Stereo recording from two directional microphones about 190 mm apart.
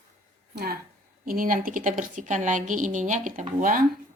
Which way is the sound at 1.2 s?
50° right (ahead or behind).